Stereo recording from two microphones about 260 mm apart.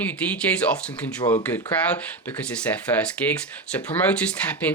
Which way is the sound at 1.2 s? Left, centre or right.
Centre.